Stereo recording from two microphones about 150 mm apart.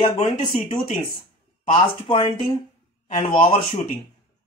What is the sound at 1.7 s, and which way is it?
Speech, 35° left (ahead or behind).